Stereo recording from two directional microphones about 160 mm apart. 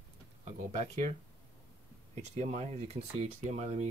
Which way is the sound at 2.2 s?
45° right (ahead or behind).